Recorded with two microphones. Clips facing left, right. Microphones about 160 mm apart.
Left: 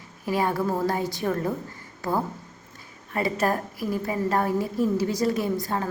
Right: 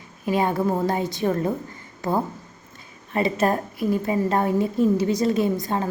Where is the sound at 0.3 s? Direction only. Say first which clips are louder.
Right 3 dB; 20° right (ahead or behind).